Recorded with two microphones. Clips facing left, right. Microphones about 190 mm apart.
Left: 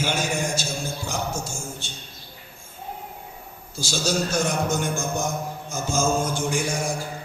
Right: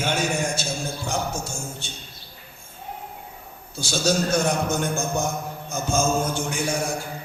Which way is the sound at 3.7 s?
60° right (ahead or behind).